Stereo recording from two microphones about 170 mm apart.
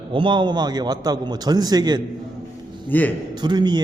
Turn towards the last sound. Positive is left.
turn(degrees=-25)  # may be behind; listen again after turning